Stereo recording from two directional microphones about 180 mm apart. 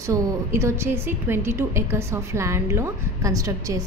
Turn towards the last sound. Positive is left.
turn(degrees=-20)  # may be behind; listen again after turning